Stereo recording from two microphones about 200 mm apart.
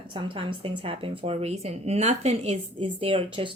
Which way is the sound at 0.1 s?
25° right (ahead or behind).